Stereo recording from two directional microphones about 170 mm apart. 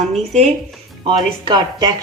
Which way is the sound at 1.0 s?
30° right (ahead or behind).